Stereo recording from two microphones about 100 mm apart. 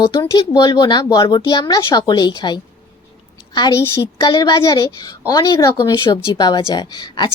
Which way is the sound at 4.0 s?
40° left (ahead or behind).